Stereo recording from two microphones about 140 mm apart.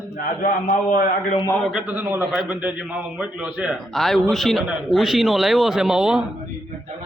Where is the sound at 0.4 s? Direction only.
80° left.